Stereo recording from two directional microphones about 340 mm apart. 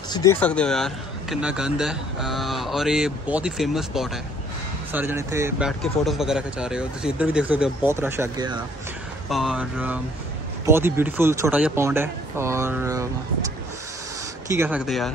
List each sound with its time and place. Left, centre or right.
0.1 s a man's voice: centre
14.5 s a man's voice: centre